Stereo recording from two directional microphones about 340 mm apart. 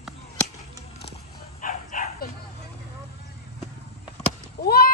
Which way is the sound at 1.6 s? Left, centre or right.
Left.